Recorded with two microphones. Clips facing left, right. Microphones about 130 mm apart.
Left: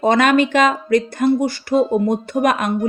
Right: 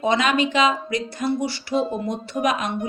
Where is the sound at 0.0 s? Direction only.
55° left (ahead or behind).